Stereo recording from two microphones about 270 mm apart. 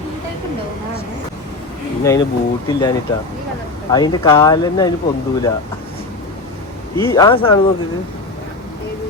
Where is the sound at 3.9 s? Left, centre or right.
Centre.